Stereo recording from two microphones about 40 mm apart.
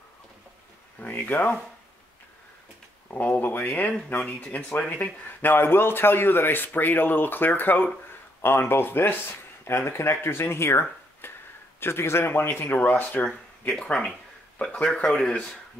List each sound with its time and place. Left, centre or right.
1.0 s speech: left
3.1 s speech: left
5.4 s a man's voice: left
8.4 s speech: left
11.8 s speech: left
14.6 s speech: left
15.0 s speech: centre